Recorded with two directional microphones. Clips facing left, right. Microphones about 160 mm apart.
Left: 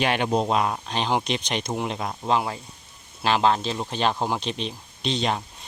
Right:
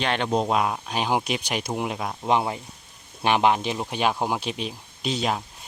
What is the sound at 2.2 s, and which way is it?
Speech, 20° right (ahead or behind).